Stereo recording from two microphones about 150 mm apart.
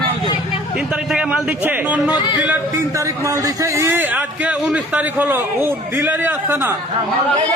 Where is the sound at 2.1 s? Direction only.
30° left (ahead or behind).